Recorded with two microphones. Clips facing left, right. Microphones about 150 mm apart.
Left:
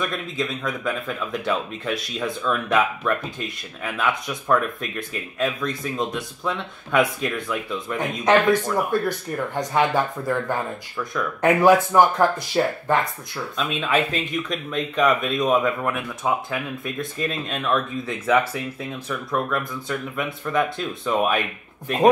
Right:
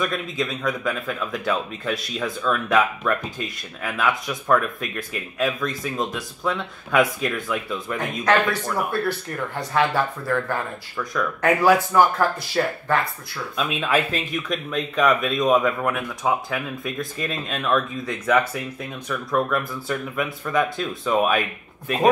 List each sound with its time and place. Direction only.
0.0 s speech: centre (ahead or behind)
8.3 s speech: 15° left (ahead or behind)
11.6 s speech: 20° left (ahead or behind)
13.6 s speech: 10° right (ahead or behind)